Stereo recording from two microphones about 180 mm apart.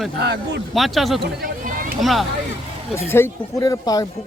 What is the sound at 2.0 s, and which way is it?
Speech, centre (ahead or behind).